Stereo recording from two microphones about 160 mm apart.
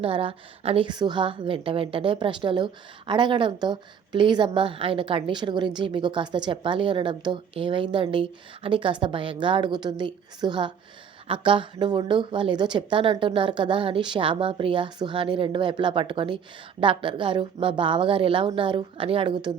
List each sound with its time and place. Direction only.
0.0 s a woman's voice: 35° right (ahead or behind)